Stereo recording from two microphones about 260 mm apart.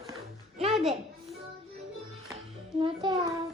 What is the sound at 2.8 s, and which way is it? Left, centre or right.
Speech, centre.